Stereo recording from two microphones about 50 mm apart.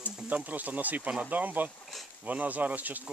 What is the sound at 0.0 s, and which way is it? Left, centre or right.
Speech, right.